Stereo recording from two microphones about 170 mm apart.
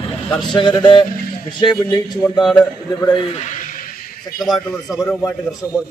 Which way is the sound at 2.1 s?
Centre (ahead or behind).